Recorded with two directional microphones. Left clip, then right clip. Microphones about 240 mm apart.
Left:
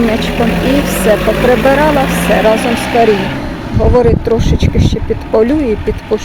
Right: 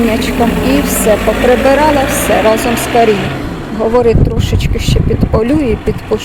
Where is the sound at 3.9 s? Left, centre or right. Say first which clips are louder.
Left 1 dB; centre.